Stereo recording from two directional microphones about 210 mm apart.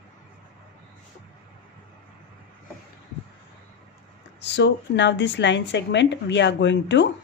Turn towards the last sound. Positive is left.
turn(degrees=60)  # may be behind; listen again after turning